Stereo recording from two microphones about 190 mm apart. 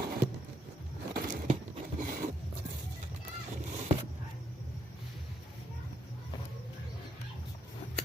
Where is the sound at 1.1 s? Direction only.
40° right (ahead or behind).